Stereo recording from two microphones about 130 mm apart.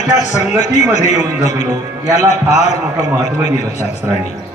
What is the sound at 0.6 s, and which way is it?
A man's voice, 65° left (ahead or behind).